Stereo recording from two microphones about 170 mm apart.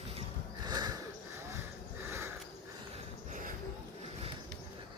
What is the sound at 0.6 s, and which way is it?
Horse, 25° right (ahead or behind).